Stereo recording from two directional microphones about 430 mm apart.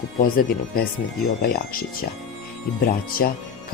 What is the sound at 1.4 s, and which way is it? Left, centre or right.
Speech, left.